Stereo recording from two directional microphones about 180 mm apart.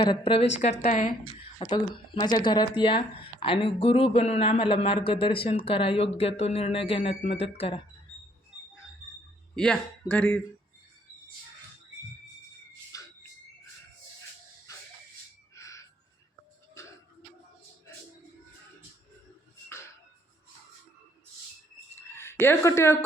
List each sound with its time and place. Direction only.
0.0 s speech: 30° left (ahead or behind)
0.6 s a woman's voice: 40° left (ahead or behind)
1.5 s speech: 25° left (ahead or behind)
9.6 s speech: 5° left (ahead or behind)
12.9 s a sound: 20° left (ahead or behind)
14.7 s music: 20° left (ahead or behind)
15.5 s crow: 15° left (ahead or behind)
22.1 s speech: 15° left (ahead or behind)